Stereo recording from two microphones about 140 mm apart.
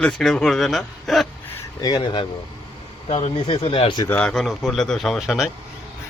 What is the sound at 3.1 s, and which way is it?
A man's voice, 50° left (ahead or behind).